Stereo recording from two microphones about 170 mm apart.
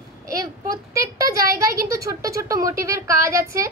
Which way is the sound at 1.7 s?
20° right (ahead or behind).